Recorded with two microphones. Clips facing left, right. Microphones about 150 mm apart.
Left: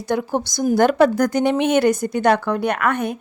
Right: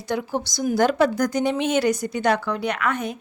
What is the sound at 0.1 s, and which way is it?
A woman's voice, 50° left (ahead or behind).